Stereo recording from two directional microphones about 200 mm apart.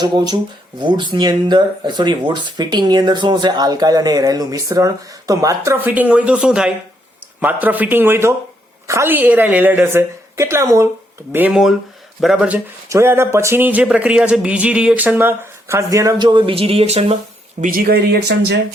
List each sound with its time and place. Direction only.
0.0 s speech: 20° right (ahead or behind)
17.6 s speech: 45° right (ahead or behind)